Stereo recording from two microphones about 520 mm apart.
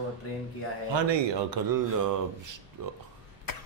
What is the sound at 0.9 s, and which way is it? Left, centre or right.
Speech, right.